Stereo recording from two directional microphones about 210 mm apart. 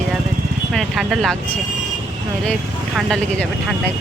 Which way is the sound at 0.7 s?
Centre (ahead or behind).